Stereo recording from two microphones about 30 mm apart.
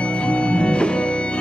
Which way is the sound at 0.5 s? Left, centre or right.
Left.